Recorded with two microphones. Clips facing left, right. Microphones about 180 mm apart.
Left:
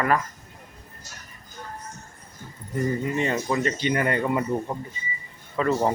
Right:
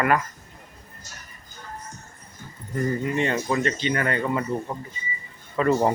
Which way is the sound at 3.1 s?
5° left (ahead or behind).